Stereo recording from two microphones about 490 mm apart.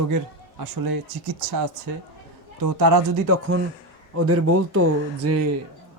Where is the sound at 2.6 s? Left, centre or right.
Right.